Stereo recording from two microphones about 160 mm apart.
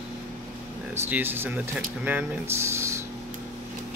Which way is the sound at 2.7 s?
15° right (ahead or behind).